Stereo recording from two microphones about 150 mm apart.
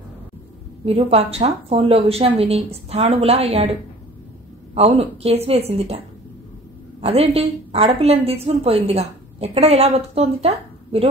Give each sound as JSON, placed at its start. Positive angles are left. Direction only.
{"t": 0.8, "sound": "a woman's voice", "side_deg": -40}
{"t": 4.7, "sound": "a woman's voice", "side_deg": -45}
{"t": 7.0, "sound": "a woman's voice", "side_deg": -45}